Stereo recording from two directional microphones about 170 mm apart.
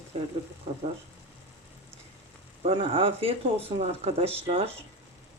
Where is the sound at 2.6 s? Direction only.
35° right (ahead or behind).